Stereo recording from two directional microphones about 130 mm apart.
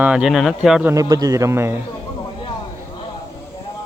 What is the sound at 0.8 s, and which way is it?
Speech, 25° right (ahead or behind).